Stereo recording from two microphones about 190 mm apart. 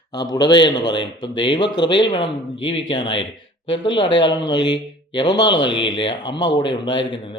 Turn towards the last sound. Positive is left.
turn(degrees=25)  # may be behind; listen again after turning